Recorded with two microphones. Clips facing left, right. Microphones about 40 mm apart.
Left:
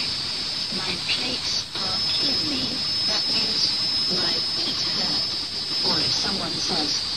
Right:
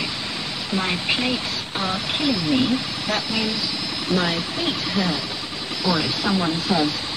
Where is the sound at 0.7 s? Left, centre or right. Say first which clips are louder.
Right 6 dB; right.